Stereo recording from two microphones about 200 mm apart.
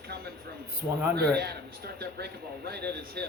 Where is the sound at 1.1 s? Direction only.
50° right (ahead or behind).